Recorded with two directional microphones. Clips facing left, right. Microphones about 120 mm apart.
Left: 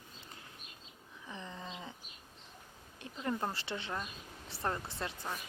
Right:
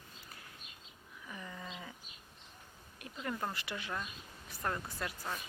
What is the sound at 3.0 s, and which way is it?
Speech, 25° left (ahead or behind).